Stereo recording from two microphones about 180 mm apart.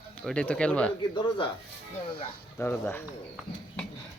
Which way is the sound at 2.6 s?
10° left (ahead or behind).